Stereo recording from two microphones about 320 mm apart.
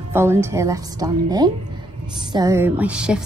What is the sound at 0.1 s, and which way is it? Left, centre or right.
A woman's voice, centre.